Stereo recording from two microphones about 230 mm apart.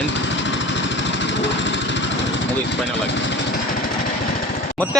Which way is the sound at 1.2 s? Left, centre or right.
Left.